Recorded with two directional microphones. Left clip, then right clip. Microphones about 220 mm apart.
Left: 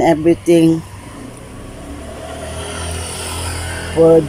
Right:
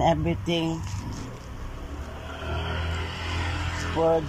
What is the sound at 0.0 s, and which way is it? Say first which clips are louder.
Speech: left 11 dB; 20° left (ahead or behind).